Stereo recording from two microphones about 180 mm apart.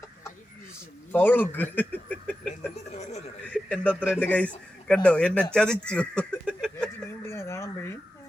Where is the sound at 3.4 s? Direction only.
5° left (ahead or behind).